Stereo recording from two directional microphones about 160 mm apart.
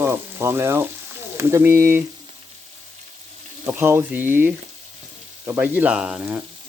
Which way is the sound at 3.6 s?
15° right (ahead or behind).